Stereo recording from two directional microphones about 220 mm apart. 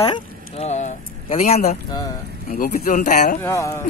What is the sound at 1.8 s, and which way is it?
Speech, 20° left (ahead or behind).